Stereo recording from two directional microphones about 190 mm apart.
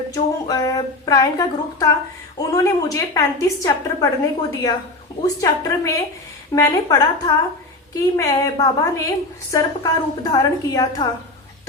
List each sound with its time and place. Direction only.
0.1 s a woman's voice: 20° left (ahead or behind)